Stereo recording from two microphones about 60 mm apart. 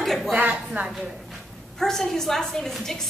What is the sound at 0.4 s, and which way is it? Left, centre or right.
Speech, right.